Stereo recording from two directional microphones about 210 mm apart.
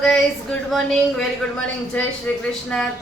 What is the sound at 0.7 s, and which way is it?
A woman's voice, 5° left (ahead or behind).